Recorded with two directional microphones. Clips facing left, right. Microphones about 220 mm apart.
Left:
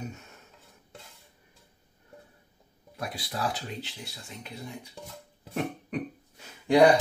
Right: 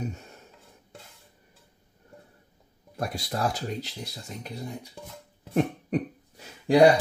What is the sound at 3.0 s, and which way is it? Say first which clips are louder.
Speech: right 4 dB; 45° right (ahead or behind).